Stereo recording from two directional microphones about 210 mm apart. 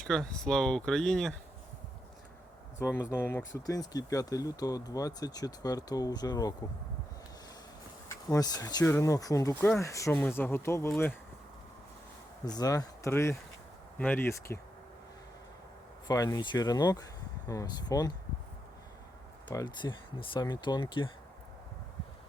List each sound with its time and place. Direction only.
0.0 s speech: 5° left (ahead or behind)
2.7 s speech: 10° left (ahead or behind)
8.1 s speech: 15° left (ahead or behind)
12.5 s speech: 20° left (ahead or behind)
16.0 s speech: 15° left (ahead or behind)
19.5 s speech: 20° left (ahead or behind)